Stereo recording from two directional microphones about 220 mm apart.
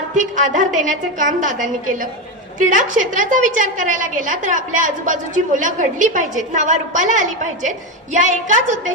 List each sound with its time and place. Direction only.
0.2 s a woman's voice: 35° right (ahead or behind)